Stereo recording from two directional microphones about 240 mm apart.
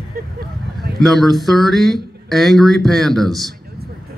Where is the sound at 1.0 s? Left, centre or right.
Centre.